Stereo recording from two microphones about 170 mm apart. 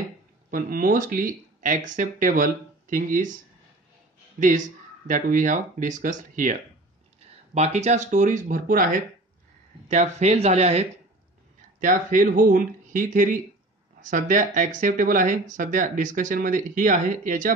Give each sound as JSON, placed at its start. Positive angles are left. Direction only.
{"t": 0.5, "sound": "speech", "side_deg": -55}
{"t": 4.4, "sound": "speech", "side_deg": -50}
{"t": 9.8, "sound": "speech", "side_deg": -40}
{"t": 11.8, "sound": "speech", "side_deg": -50}